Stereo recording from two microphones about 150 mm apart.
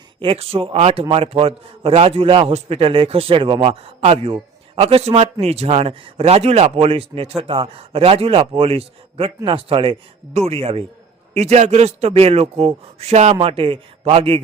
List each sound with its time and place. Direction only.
0.2 s a man's voice: 40° right (ahead or behind)
11.3 s a man's voice: 50° right (ahead or behind)